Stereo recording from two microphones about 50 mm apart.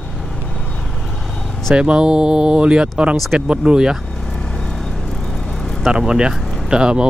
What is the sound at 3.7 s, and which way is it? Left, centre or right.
Speech, centre.